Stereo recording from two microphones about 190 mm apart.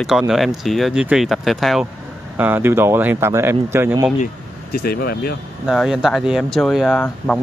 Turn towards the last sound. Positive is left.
turn(degrees=5)  # may be behind; listen again after turning